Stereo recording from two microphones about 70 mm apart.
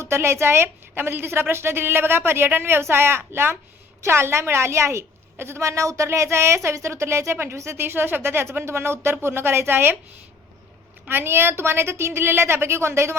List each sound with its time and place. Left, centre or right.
0.0 s a woman's voice: right
11.1 s a woman's voice: right